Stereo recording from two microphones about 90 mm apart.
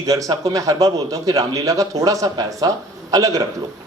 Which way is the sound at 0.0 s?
40° right (ahead or behind).